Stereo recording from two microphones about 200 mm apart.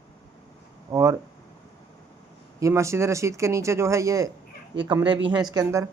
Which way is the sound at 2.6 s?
15° right (ahead or behind).